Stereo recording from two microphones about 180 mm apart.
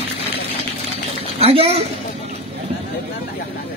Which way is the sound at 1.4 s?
35° right (ahead or behind).